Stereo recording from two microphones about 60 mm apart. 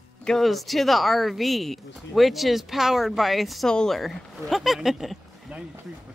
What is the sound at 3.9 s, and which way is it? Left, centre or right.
Speech, centre.